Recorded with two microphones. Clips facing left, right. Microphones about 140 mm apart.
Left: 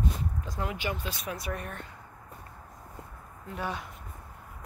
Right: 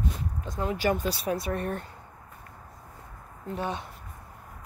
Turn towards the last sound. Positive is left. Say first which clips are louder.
# right 3 dB
turn(degrees=-25)  # may be behind; listen again after turning